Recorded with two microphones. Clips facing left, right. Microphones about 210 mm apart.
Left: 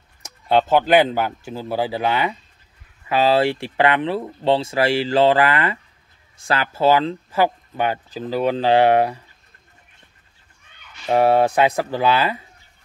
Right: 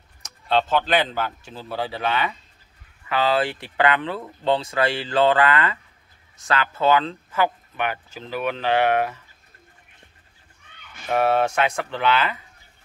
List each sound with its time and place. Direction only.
0.6 s speech: 15° left (ahead or behind)
1.5 s speech: 25° left (ahead or behind)
11.1 s speech: 25° left (ahead or behind)